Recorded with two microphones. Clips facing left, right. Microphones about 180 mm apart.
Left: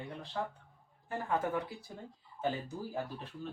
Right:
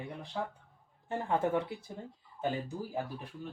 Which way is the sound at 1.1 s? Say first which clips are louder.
Right 3 dB; 25° right (ahead or behind).